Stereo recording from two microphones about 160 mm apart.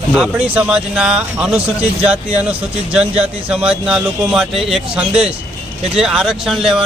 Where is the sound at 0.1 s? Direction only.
5° right (ahead or behind).